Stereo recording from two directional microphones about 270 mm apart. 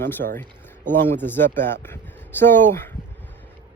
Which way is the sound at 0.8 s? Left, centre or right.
Centre.